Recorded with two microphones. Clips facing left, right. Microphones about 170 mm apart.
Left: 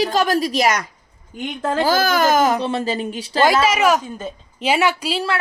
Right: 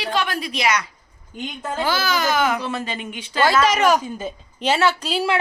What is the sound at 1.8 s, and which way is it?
Speech, 50° left (ahead or behind).